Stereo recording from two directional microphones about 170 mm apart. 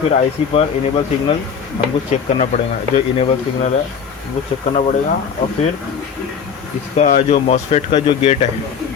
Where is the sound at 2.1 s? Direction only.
40° left (ahead or behind).